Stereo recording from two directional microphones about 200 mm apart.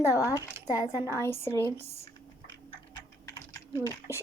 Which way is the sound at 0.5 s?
10° right (ahead or behind).